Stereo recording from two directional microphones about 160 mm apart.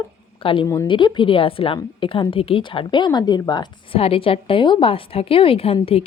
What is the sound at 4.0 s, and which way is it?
A woman's voice, 35° left (ahead or behind).